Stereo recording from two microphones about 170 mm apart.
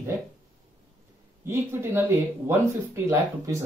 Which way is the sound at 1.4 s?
15° right (ahead or behind).